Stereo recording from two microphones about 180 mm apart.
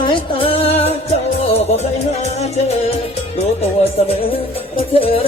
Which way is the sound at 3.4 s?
35° left (ahead or behind).